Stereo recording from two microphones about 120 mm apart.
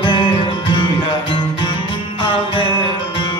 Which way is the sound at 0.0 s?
40° left (ahead or behind).